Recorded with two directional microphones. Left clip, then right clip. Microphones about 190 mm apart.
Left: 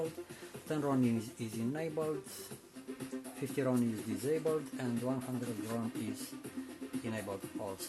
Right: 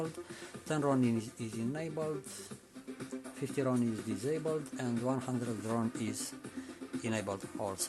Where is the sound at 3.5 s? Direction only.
10° right (ahead or behind).